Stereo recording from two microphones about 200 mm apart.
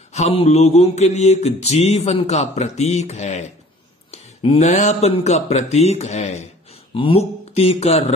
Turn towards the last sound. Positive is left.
turn(degrees=30)  # may be behind; listen again after turning